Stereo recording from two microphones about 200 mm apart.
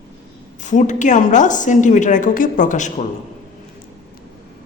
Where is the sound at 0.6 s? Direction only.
40° left (ahead or behind).